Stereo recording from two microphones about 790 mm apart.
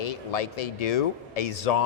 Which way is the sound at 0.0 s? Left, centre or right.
Left.